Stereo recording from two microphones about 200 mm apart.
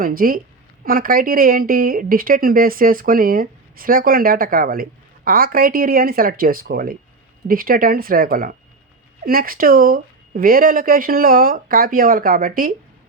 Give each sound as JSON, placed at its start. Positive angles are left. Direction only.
{"t": 0.0, "sound": "speech", "side_deg": -45}